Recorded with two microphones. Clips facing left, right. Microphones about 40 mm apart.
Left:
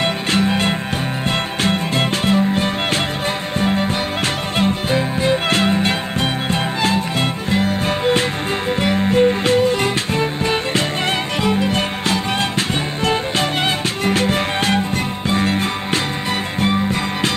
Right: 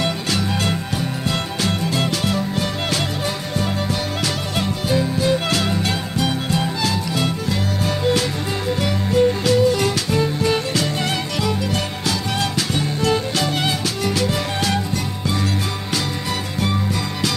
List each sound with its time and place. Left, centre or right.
0.0 s music: left